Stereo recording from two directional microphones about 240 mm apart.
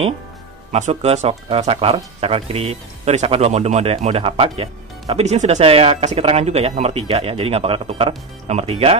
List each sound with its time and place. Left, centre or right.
0.7 s speech: right